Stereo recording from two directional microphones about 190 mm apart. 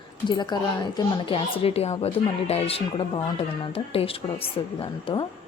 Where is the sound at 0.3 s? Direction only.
25° left (ahead or behind).